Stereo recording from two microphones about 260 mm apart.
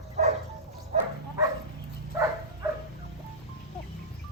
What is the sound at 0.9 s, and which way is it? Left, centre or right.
Dog, right.